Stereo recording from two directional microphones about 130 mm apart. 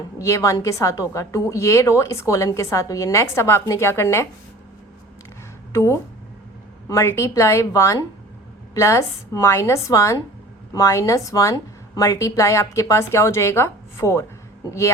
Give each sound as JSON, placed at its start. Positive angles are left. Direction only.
{"t": 0.2, "sound": "a woman's voice", "side_deg": 20}
{"t": 5.7, "sound": "a woman's voice", "side_deg": 20}